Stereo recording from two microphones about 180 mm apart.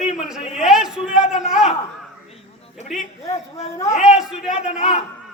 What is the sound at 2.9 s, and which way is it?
Speech, centre (ahead or behind).